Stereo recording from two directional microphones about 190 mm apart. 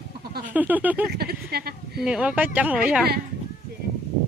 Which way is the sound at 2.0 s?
5° right (ahead or behind).